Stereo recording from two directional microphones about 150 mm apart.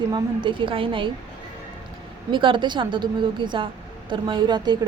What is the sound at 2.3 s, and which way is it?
Speech, 35° right (ahead or behind).